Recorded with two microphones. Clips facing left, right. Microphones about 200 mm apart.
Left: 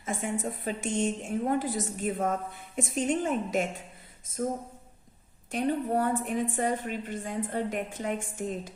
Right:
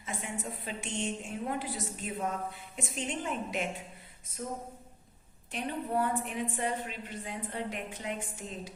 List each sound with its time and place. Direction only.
0.0 s a woman's voice: 50° left (ahead or behind)
5.5 s a woman's voice: 45° left (ahead or behind)